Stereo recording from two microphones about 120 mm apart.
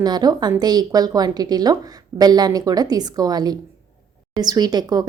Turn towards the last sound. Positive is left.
turn(degrees=-35)  # may be behind; listen again after turning